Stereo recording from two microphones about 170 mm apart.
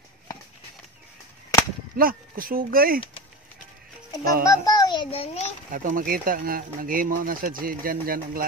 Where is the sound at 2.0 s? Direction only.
55° right (ahead or behind).